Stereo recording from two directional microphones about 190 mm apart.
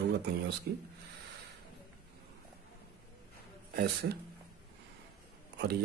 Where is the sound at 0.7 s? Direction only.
60° right (ahead or behind).